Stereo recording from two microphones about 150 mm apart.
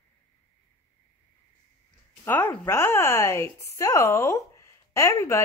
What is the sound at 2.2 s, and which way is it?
A woman's voice, 15° left (ahead or behind).